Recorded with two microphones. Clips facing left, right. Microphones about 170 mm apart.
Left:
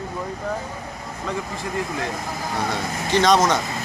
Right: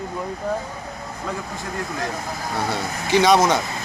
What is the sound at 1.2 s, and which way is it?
Speech, centre (ahead or behind).